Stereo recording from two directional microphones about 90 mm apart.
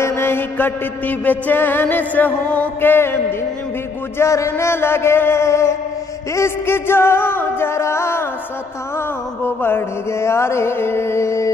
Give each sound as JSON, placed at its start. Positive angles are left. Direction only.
{"t": 0.0, "sound": "mantra", "side_deg": 30}